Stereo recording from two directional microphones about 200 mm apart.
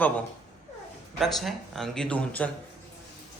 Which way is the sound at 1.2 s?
Centre (ahead or behind).